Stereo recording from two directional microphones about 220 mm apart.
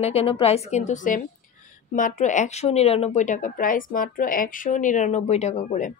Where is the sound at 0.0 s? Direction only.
25° left (ahead or behind).